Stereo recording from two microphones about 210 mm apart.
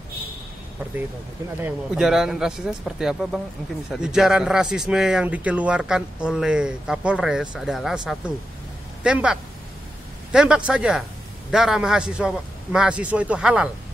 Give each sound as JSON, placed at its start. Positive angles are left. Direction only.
{"t": 1.6, "sound": "speech", "side_deg": 0}